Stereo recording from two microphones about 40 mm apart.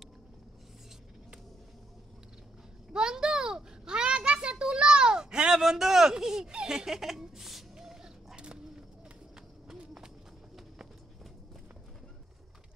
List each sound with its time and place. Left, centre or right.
2.9 s a sound: centre
7.7 s dog: centre
8.4 s bird: right
9.9 s run: centre